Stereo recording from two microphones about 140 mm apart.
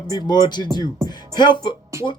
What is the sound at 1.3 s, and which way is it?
Speech, 30° left (ahead or behind).